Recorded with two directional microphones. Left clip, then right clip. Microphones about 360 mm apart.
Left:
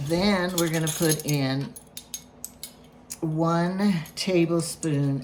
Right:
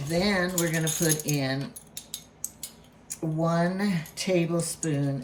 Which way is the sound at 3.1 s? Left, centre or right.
Centre.